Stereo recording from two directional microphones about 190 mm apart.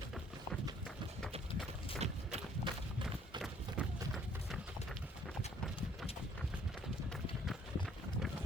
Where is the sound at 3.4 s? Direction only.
Centre (ahead or behind).